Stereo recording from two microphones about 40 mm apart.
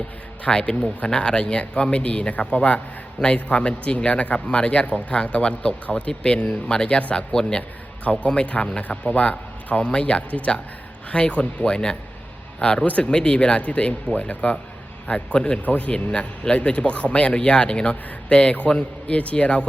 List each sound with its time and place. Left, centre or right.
0.5 s speech: left
12.8 s speech: left
13.1 s speech: left
15.5 s speech: left